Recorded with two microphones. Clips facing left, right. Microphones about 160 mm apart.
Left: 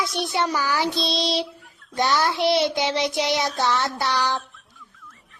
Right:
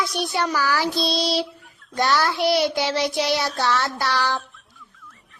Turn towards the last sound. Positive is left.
turn(degrees=20)  # may be behind; listen again after turning